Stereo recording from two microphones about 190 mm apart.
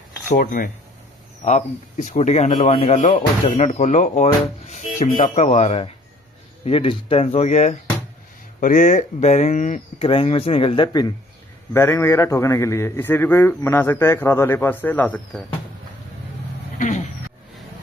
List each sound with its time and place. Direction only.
0.3 s speech: 50° left (ahead or behind); by 11.1 s 25° left (ahead or behind)
11.7 s a man's voice: 15° left (ahead or behind)
16.7 s vehicle: 40° left (ahead or behind)